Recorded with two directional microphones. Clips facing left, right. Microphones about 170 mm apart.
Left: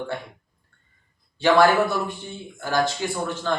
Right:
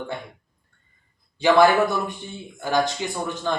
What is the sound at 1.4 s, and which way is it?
Speech, 15° right (ahead or behind).